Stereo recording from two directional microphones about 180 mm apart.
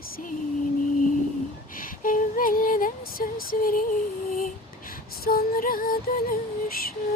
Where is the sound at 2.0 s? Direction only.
50° left (ahead or behind).